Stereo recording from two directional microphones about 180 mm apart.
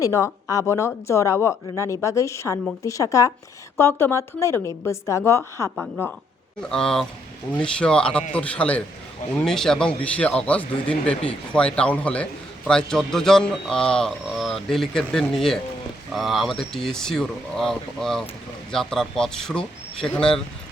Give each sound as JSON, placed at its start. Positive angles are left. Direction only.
{"t": 0.0, "sound": "speech", "side_deg": 15}
{"t": 5.7, "sound": "speech", "side_deg": -5}